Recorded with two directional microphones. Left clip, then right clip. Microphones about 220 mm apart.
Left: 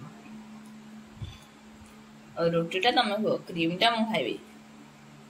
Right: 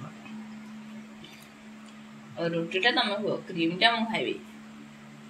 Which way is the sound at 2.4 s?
15° left (ahead or behind).